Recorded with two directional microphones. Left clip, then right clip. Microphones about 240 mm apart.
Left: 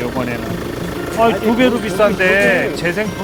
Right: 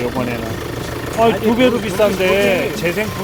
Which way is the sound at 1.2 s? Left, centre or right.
Centre.